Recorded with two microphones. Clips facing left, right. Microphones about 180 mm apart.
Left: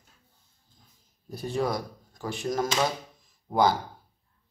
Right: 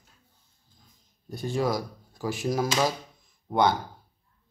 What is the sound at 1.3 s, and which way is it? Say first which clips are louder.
Speech: right 1 dB; centre (ahead or behind).